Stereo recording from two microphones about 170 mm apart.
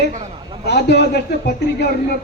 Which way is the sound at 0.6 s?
75° left (ahead or behind).